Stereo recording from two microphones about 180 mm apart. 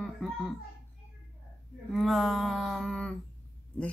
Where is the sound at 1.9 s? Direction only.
Centre (ahead or behind).